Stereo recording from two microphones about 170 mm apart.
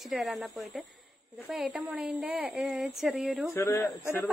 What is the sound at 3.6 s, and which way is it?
Speech, 15° left (ahead or behind).